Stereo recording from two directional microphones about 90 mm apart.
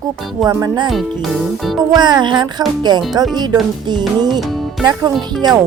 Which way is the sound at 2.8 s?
55° right (ahead or behind).